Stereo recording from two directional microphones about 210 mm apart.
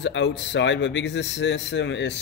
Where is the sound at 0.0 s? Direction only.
60° left (ahead or behind).